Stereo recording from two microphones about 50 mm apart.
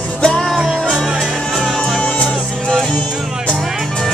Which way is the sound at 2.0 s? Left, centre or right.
Left.